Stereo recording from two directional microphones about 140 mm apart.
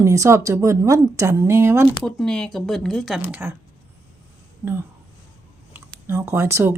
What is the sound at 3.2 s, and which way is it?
Speech, 15° right (ahead or behind).